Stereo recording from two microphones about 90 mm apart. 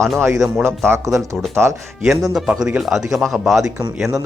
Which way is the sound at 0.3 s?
Centre (ahead or behind).